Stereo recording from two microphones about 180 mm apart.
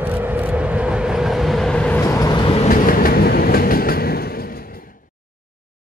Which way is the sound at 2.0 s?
20° left (ahead or behind).